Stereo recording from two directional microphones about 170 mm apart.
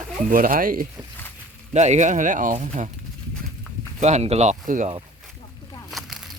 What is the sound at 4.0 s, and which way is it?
Speech, 40° right (ahead or behind).